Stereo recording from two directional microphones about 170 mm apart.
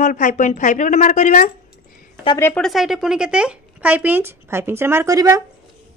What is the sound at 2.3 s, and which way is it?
Speech, 15° left (ahead or behind).